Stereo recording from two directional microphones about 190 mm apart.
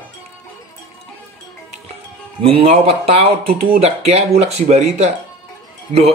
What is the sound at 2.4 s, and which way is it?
Speech, 30° right (ahead or behind).